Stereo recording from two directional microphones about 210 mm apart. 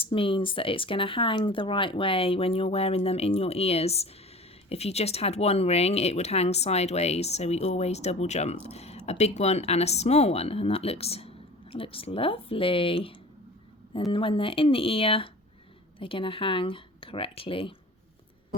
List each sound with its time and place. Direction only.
0.0 s speech: 25° left (ahead or behind)